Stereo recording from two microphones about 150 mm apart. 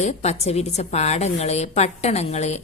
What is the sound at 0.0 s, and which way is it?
A woman's voice, 50° left (ahead or behind).